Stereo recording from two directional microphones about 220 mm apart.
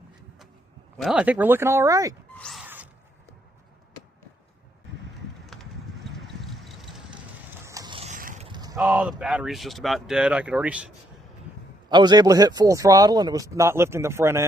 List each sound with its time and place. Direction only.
0.9 s a man's voice: 5° right (ahead or behind)
2.4 s zipper: centre (ahead or behind)
5.5 s vehicle: centre (ahead or behind)
7.6 s boat: 15° right (ahead or behind); by 8.4 s 35° right (ahead or behind)
8.4 s a sound: 20° right (ahead or behind)
8.8 s speech: 5° right (ahead or behind)
11.9 s a man's voice: 20° right (ahead or behind)